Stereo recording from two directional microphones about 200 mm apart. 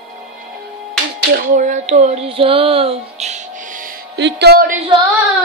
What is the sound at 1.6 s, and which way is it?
Music, 35° right (ahead or behind).